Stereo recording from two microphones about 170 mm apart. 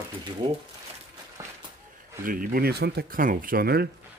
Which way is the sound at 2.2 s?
55° right (ahead or behind).